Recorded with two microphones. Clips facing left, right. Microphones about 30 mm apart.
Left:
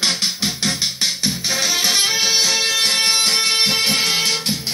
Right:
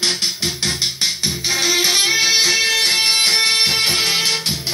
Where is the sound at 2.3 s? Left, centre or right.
Right.